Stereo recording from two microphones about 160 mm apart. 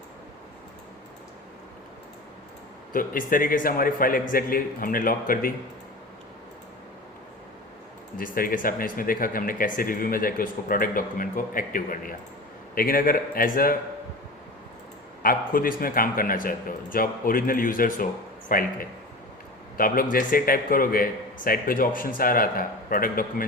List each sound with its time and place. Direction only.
2.9 s speech: 60° left (ahead or behind)
8.2 s speech: 60° left (ahead or behind)
15.2 s speech: 60° left (ahead or behind)